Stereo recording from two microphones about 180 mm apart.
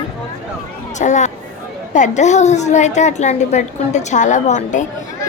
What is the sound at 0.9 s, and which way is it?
A woman's voice, 40° left (ahead or behind).